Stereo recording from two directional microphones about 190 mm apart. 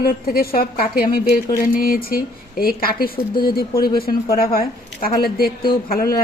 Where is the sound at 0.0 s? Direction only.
50° left (ahead or behind).